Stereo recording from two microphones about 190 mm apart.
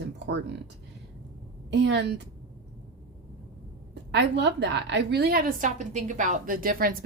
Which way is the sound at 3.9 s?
65° right (ahead or behind).